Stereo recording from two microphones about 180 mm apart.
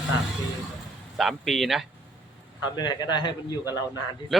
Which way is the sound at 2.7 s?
25° left (ahead or behind).